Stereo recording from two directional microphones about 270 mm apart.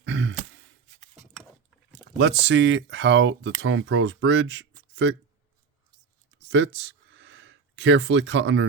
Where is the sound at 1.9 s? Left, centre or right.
Right.